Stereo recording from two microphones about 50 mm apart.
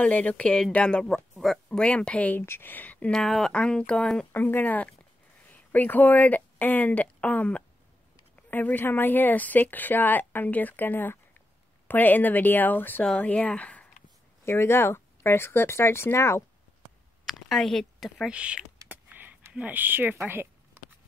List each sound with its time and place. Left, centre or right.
0.0 s speech: left
2.4 s a woman's voice: left
3.1 s speech: centre
3.5 s speech: centre
4.3 s a woman's voice: left
13.2 s speech: left
14.4 s speech: left
17.3 s a woman's voice: centre
18.3 s speech: right
18.9 s a sound: right
19.5 s speech: right
20.2 s a sound: right